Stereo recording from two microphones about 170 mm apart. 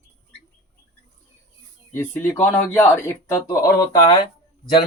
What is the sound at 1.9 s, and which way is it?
A man's voice, 10° left (ahead or behind).